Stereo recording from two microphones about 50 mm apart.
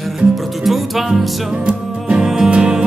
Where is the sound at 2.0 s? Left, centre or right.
Centre.